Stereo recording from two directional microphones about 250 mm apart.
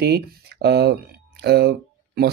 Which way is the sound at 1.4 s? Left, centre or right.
Right.